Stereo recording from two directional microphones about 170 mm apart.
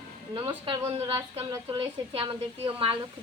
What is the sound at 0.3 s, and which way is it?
A woman's voice, 30° right (ahead or behind).